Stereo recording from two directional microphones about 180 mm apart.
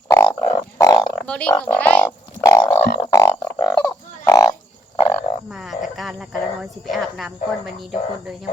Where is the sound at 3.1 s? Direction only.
15° left (ahead or behind).